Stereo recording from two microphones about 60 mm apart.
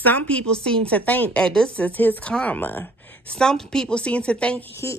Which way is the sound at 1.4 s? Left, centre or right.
Centre.